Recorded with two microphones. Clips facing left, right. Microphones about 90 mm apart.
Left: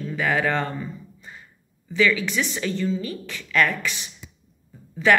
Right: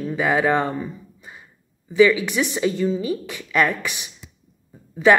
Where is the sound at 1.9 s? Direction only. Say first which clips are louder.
Right 6 dB; 15° right (ahead or behind).